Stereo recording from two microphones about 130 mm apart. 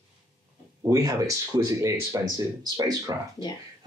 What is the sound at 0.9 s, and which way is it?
Speech, 25° right (ahead or behind).